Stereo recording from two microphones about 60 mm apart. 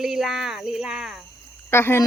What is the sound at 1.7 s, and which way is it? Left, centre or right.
Speech, left.